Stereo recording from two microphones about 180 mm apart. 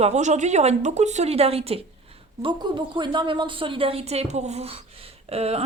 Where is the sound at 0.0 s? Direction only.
40° right (ahead or behind).